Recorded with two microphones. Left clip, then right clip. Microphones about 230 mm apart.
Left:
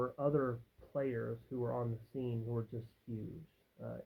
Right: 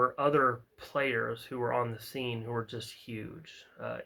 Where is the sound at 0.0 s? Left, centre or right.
Centre.